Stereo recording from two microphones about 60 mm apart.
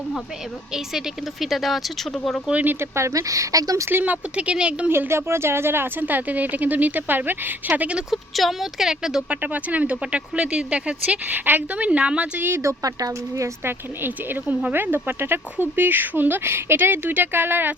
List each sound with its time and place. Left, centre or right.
0.7 s speech: centre
2.5 s speech: right
2.8 s speech: right
3.8 s speech: right
4.9 s speech: right
7.7 s speech: centre
8.1 s speech: centre
9.3 s speech: right
12.4 s speech: right
12.6 s speech: right
13.7 s speech: right